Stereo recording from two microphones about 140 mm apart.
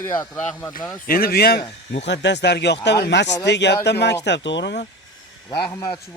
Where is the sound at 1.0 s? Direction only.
90° left.